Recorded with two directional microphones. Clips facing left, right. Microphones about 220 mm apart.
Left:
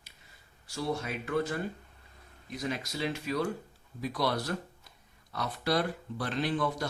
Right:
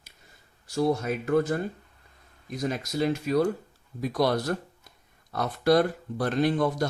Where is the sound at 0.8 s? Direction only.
45° right (ahead or behind).